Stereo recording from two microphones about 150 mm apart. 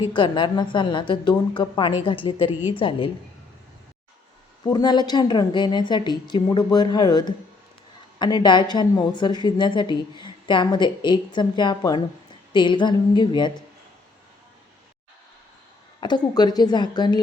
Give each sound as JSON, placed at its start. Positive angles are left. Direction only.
{"t": 0.0, "sound": "a woman's voice", "side_deg": 30}
{"t": 4.6, "sound": "a woman's voice", "side_deg": 30}
{"t": 16.0, "sound": "a woman's voice", "side_deg": 30}